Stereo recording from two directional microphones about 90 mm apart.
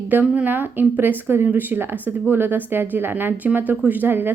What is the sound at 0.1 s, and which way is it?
Speech, 20° right (ahead or behind).